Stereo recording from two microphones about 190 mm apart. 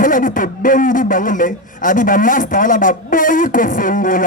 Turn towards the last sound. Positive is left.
turn(degrees=45)  # may be behind; listen again after turning